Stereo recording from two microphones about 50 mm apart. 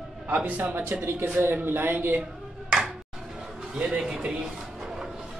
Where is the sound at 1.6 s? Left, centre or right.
Right.